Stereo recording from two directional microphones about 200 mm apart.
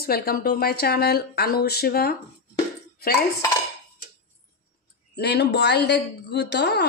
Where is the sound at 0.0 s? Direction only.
50° left (ahead or behind).